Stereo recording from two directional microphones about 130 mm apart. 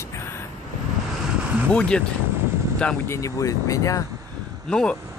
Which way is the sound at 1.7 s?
5° left (ahead or behind).